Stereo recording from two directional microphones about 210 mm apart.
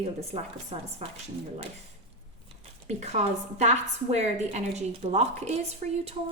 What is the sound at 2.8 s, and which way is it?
A woman's voice, 30° right (ahead or behind).